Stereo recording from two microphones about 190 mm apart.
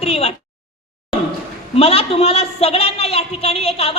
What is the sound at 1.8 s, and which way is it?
A man's voice, 30° left (ahead or behind).